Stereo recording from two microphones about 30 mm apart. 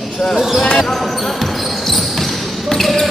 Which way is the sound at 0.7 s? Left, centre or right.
Centre.